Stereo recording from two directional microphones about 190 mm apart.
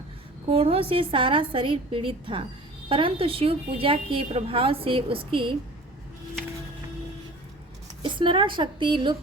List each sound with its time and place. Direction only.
0.5 s a woman's voice: 30° right (ahead or behind)
8.0 s a woman's voice: 25° right (ahead or behind)